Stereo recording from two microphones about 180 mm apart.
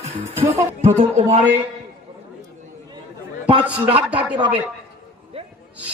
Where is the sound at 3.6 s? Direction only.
10° right (ahead or behind).